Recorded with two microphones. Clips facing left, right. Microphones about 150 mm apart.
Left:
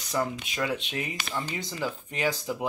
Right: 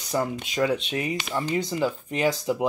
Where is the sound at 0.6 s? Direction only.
35° right (ahead or behind).